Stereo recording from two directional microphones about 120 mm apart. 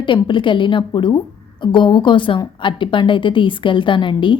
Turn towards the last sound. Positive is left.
turn(degrees=40)  # may be behind; listen again after turning